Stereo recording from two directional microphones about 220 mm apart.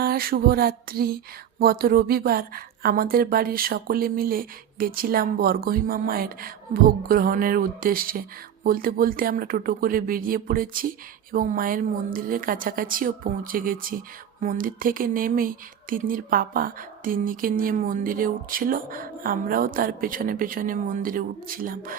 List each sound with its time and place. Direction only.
0.0 s music: 45° right (ahead or behind)
1.5 s speech: 45° right (ahead or behind)